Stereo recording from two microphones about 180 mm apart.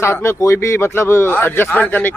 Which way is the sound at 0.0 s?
15° left (ahead or behind).